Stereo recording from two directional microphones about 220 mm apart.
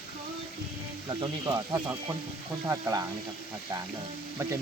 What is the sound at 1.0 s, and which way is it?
Speech, 20° right (ahead or behind).